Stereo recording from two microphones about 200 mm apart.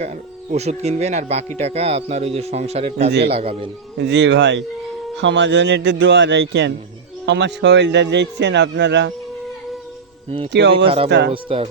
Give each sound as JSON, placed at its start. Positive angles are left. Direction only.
{"t": 0.5, "sound": "speech", "side_deg": -35}
{"t": 3.1, "sound": "a man's voice", "side_deg": -55}
{"t": 3.3, "sound": "speech", "side_deg": -30}
{"t": 3.9, "sound": "a man's voice", "side_deg": -60}
{"t": 10.2, "sound": "speech", "side_deg": -30}
{"t": 10.5, "sound": "a man's voice", "side_deg": -60}
{"t": 10.8, "sound": "speech", "side_deg": -25}